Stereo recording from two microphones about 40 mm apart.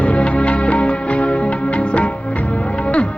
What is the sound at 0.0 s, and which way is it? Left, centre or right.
Music, left.